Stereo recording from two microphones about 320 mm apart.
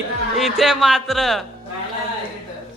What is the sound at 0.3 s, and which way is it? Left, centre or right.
A man's voice, centre.